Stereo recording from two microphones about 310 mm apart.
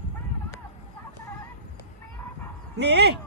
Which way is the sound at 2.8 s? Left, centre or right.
Right.